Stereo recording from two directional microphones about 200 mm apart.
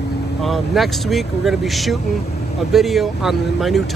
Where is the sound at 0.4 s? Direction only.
Centre (ahead or behind).